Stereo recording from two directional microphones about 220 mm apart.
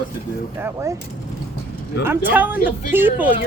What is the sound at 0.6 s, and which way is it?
Speech, 15° right (ahead or behind).